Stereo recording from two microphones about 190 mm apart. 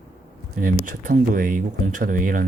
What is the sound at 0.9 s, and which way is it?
Speech, 45° right (ahead or behind).